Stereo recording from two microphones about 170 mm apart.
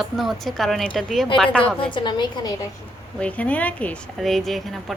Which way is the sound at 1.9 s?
25° left (ahead or behind).